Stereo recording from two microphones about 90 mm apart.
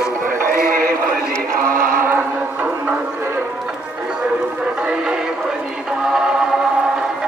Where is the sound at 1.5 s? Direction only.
30° right (ahead or behind).